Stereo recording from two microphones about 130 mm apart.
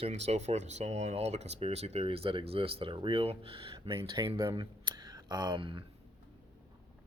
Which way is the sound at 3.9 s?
20° right (ahead or behind).